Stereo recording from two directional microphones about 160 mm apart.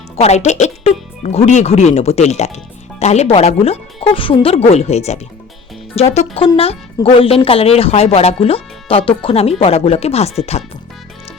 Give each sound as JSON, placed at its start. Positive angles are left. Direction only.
{"t": 0.2, "sound": "speech", "side_deg": 45}